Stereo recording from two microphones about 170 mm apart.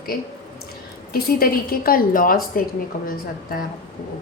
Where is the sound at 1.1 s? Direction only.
60° left (ahead or behind).